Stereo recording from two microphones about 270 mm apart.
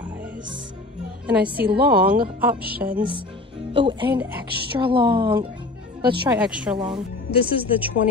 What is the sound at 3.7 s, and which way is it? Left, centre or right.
A woman's voice, centre.